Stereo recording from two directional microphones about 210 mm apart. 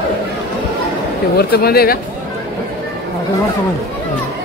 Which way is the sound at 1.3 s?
50° left (ahead or behind).